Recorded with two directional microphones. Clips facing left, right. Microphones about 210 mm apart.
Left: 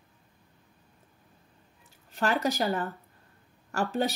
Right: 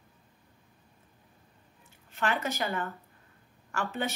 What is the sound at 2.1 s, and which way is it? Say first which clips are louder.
Speech: left 4 dB; 40° left (ahead or behind).